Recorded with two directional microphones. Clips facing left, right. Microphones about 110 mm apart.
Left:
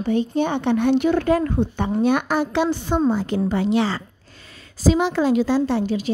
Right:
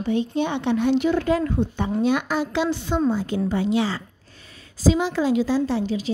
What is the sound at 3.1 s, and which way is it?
A woman's voice, 65° left (ahead or behind).